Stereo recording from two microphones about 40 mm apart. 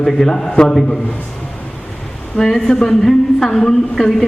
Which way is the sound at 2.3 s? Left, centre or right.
Centre.